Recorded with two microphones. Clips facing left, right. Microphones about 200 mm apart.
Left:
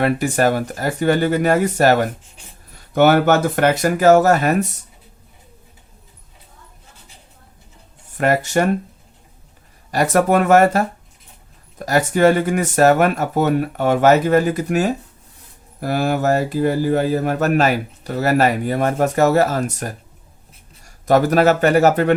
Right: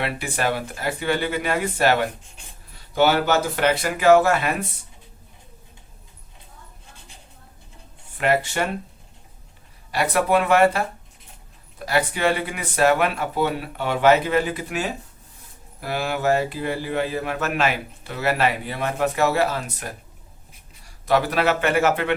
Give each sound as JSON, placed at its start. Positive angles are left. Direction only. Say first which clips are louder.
{"t": 0.0, "sound": "speech", "louder": "left 8 dB", "side_deg": 45}
{"t": 8.2, "sound": "speech", "louder": "left 5 dB", "side_deg": 45}
{"t": 9.9, "sound": "speech", "louder": "left 5 dB", "side_deg": 45}